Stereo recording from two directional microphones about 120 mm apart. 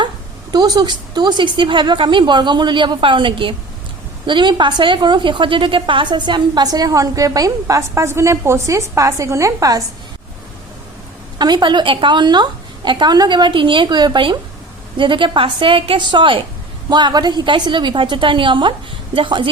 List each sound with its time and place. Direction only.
0.5 s a woman's voice: 35° right (ahead or behind)
11.3 s a woman's voice: 35° right (ahead or behind)